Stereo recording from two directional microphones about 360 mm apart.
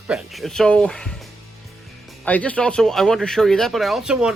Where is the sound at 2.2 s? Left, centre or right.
Centre.